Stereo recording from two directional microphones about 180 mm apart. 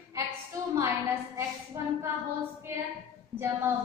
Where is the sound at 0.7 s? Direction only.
15° right (ahead or behind).